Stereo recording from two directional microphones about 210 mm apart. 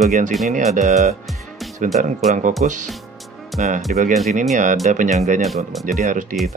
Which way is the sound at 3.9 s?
35° right (ahead or behind).